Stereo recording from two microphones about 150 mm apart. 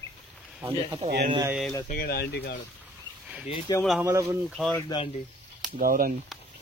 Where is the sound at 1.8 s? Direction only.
85° left.